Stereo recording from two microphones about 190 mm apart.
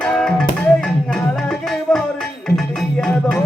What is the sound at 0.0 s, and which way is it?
Music, 5° left (ahead or behind).